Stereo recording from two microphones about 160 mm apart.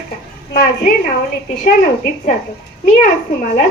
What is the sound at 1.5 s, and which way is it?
A woman's voice, 55° left (ahead or behind).